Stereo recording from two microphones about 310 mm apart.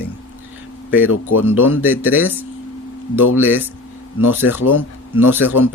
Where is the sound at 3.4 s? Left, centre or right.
Centre.